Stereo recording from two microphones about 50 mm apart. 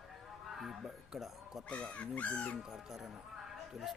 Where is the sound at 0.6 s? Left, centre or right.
Centre.